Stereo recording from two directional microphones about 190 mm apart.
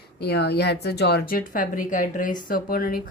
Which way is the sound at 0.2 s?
60° left (ahead or behind).